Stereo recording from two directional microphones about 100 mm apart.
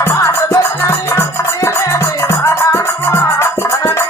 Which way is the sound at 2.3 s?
25° left (ahead or behind).